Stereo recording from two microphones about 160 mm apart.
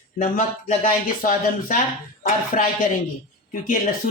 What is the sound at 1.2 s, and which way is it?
Speech, 60° left (ahead or behind).